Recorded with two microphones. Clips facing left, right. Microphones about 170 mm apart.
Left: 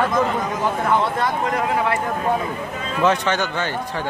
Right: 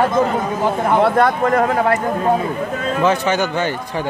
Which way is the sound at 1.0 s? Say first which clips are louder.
Right 7 dB; 60° right (ahead or behind).